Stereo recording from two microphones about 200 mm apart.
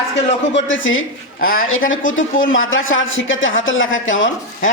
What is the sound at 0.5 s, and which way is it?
Speech, 70° left (ahead or behind).